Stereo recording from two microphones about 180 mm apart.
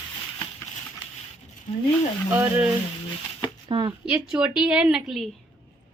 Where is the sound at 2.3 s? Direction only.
10° right (ahead or behind).